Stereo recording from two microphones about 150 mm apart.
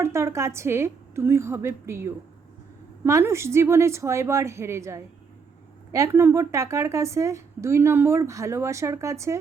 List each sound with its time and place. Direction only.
0.0 s a woman's voice: 20° right (ahead or behind)